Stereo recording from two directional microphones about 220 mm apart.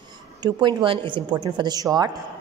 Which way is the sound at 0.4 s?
20° right (ahead or behind).